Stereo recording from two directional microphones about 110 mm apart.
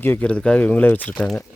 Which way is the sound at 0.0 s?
15° left (ahead or behind).